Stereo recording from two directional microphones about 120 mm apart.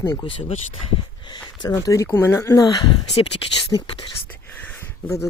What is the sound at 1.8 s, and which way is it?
Speech, 25° left (ahead or behind).